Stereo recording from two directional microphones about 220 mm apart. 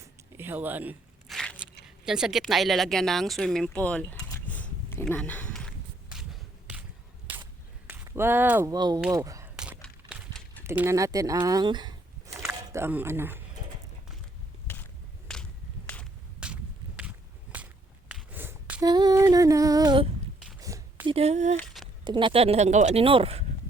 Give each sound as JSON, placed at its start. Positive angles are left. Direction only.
{"t": 0.0, "sound": "a sound", "side_deg": -10}
{"t": 7.9, "sound": "speech", "side_deg": -10}
{"t": 9.0, "sound": "speech", "side_deg": -5}
{"t": 9.2, "sound": "a sound", "side_deg": -15}
{"t": 9.6, "sound": "a sound", "side_deg": -5}
{"t": 10.6, "sound": "speech", "side_deg": -10}
{"t": 15.3, "sound": "whip", "side_deg": 5}
{"t": 18.1, "sound": "female singing", "side_deg": -5}
{"t": 20.6, "sound": "a sound", "side_deg": -15}
{"t": 21.2, "sound": "speech", "side_deg": -30}
{"t": 21.6, "sound": "speech", "side_deg": 0}
{"t": 22.0, "sound": "speech", "side_deg": -20}